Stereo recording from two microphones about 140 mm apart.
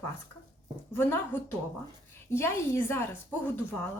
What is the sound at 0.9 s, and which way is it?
A woman's voice, 15° left (ahead or behind).